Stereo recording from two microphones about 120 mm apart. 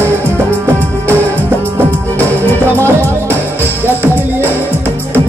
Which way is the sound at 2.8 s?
20° right (ahead or behind).